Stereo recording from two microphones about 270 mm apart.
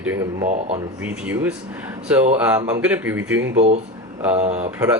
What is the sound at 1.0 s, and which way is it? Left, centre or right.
Speech, centre.